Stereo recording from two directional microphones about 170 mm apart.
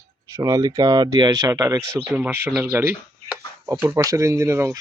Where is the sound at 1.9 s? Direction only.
10° right (ahead or behind).